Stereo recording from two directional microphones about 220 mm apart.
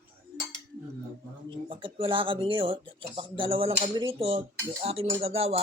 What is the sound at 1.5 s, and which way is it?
Speech, 20° right (ahead or behind).